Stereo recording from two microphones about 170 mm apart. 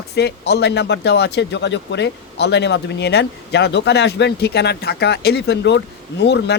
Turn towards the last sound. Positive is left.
turn(degrees=90)